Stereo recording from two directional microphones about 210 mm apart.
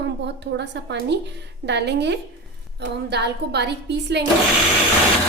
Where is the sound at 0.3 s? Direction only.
55° right (ahead or behind).